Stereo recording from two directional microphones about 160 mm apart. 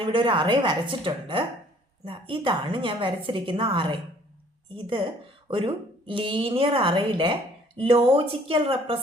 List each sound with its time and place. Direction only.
0.0 s speech: 30° right (ahead or behind)